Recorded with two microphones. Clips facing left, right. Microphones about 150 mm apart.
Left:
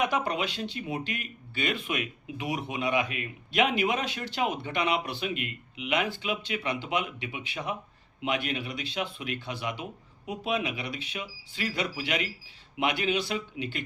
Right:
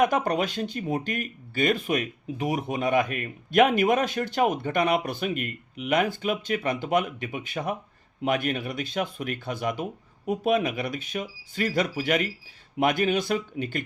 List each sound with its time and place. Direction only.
0.0 s speech: 45° right (ahead or behind)